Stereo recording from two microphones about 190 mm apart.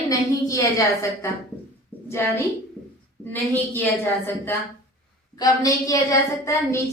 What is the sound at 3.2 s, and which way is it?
A woman's voice, 10° left (ahead or behind).